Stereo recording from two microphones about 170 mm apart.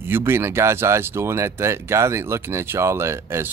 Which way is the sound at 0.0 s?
15° right (ahead or behind).